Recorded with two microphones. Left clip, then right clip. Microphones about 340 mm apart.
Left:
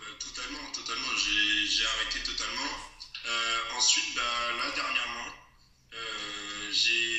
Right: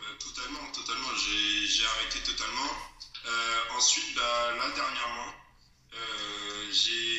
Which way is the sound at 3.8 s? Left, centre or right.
Right.